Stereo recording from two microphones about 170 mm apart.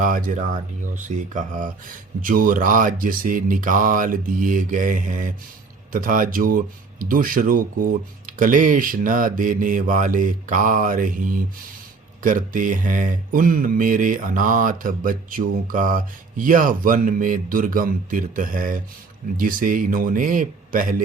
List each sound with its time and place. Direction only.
0.0 s speech: 50° right (ahead or behind)